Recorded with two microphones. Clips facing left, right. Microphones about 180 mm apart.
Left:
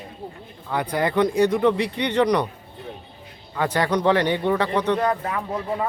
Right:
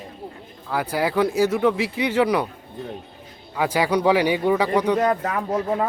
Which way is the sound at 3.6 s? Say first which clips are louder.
Right 1 dB; 10° right (ahead or behind).